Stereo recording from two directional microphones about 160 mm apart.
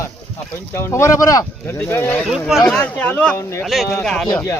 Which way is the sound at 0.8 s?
20° left (ahead or behind).